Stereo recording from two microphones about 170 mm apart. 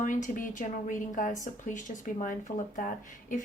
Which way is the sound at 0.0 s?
50° left (ahead or behind).